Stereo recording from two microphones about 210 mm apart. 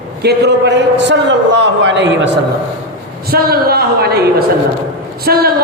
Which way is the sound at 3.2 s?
45° right (ahead or behind).